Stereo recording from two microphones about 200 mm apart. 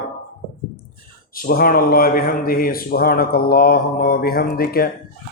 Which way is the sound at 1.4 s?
45° left (ahead or behind).